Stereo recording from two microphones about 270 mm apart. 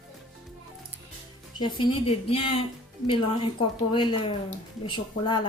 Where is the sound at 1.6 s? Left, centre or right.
Centre.